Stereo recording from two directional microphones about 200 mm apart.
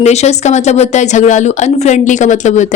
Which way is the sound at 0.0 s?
35° left (ahead or behind).